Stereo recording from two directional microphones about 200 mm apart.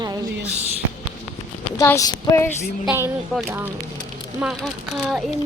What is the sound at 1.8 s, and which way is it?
Speech, 15° left (ahead or behind).